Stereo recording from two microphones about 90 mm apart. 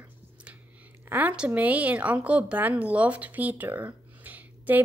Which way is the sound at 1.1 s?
15° right (ahead or behind).